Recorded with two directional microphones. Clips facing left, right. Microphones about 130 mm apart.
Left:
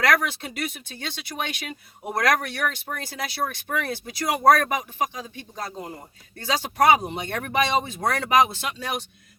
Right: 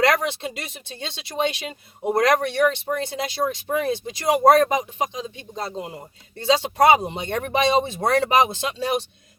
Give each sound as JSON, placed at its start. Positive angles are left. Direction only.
{"t": 0.0, "sound": "speech", "side_deg": -25}